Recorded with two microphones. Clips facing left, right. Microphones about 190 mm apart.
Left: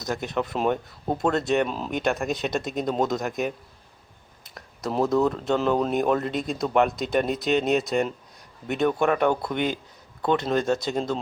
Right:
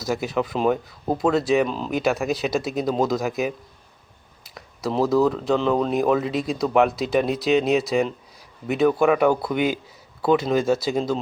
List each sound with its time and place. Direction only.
0.0 s speech: 5° right (ahead or behind)